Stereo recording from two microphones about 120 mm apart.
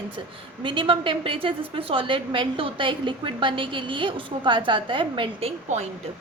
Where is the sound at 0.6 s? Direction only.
45° right (ahead or behind).